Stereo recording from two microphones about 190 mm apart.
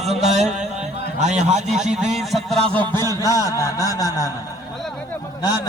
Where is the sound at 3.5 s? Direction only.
15° left (ahead or behind).